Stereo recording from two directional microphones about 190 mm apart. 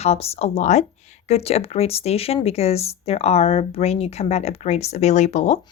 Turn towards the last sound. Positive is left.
turn(degrees=35)  # may be behind; listen again after turning